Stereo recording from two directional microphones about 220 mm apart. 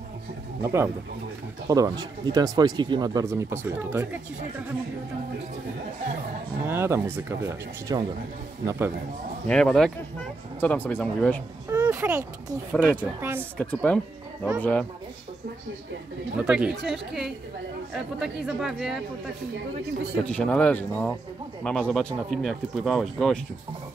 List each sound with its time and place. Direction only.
0.6 s speech: 15° right (ahead or behind)
6.7 s speech: 10° right (ahead or behind)
9.5 s speech: 5° left (ahead or behind)
11.7 s speech: 10° right (ahead or behind)
13.6 s speech: 5° left (ahead or behind)
16.3 s speech: 5° right (ahead or behind)
20.2 s speech: 5° left (ahead or behind)